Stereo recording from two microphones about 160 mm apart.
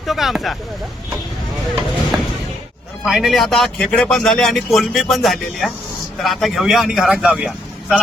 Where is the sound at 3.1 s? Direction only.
Centre (ahead or behind).